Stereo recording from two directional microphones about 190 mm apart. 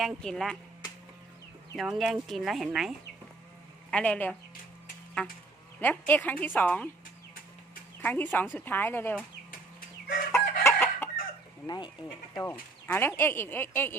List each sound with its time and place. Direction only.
0.0 s speech: centre (ahead or behind)
1.7 s speech: centre (ahead or behind)
3.9 s speech: 5° left (ahead or behind)
5.8 s speech: 5° left (ahead or behind)
8.0 s speech: 10° left (ahead or behind)
10.3 s chicken: 15° left (ahead or behind)
11.6 s speech: 20° left (ahead or behind)